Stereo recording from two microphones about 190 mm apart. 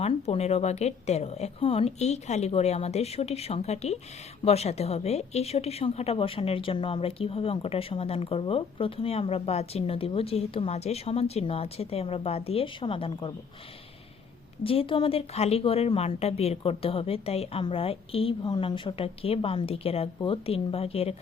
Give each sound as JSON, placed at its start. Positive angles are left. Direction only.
{"t": 0.0, "sound": "a woman's voice", "side_deg": 35}
{"t": 14.6, "sound": "a woman's voice", "side_deg": 30}